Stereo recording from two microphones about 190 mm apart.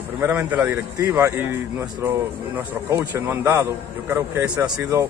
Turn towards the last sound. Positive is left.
turn(degrees=-15)  # may be behind; listen again after turning